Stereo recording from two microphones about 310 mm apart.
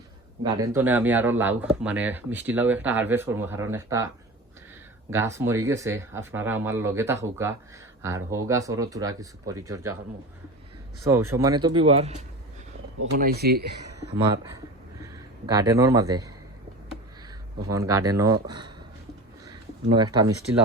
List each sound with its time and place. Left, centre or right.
0.4 s speech: centre
5.1 s speech: centre
11.1 s speech: centre
13.1 s speech: right
15.0 s a man's voice: centre
17.7 s speech: centre
19.5 s a sound: centre